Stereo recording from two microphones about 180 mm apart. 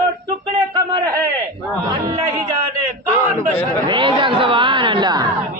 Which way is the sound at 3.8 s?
25° right (ahead or behind).